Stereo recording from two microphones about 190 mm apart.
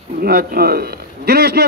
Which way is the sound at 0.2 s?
55° right (ahead or behind).